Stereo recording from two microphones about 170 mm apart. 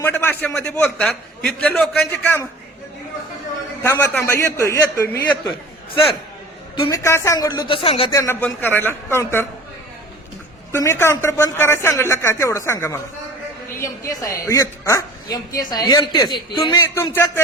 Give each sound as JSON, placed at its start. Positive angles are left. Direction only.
{"t": 0.0, "sound": "a man's voice", "side_deg": 10}
{"t": 3.8, "sound": "a man's voice", "side_deg": 15}
{"t": 6.7, "sound": "speech", "side_deg": 30}
{"t": 7.0, "sound": "speech", "side_deg": 15}
{"t": 8.1, "sound": "a man's voice", "side_deg": 15}
{"t": 10.7, "sound": "a man's voice", "side_deg": 15}